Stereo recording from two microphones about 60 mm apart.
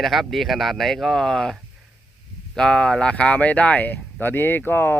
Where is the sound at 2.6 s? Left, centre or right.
Centre.